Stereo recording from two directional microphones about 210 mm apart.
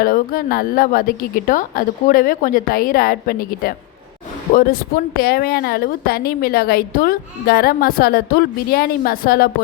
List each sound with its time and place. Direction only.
0.0 s a woman's voice: 40° left (ahead or behind)